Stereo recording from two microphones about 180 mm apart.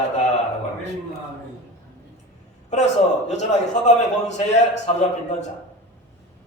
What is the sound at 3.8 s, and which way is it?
A man's voice, 40° left (ahead or behind).